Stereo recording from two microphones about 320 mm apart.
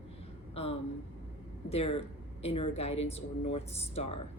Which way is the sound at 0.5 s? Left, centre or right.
Centre.